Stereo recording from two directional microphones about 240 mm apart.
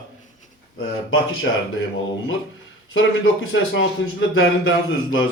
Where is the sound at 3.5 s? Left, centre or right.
Left.